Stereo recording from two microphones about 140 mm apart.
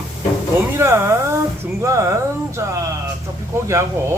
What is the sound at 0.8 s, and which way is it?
Speech, 20° right (ahead or behind).